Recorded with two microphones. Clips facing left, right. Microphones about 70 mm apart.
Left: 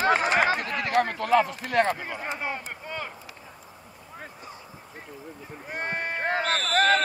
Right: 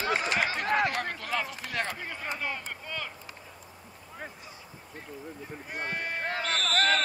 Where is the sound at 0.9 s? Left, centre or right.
Left.